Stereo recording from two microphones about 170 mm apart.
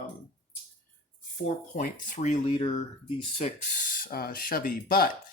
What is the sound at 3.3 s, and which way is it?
Speech, 40° left (ahead or behind).